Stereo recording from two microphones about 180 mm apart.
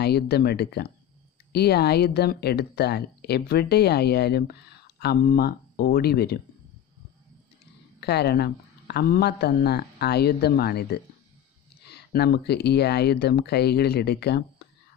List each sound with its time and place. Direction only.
0.0 s speech: 65° left (ahead or behind)
8.0 s speech: 65° left (ahead or behind)
14.6 s a sound: 65° left (ahead or behind)